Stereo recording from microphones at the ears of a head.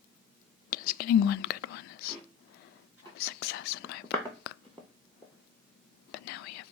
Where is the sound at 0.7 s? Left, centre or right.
Left.